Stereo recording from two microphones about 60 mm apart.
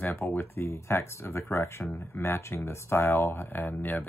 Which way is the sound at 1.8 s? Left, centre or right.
Left.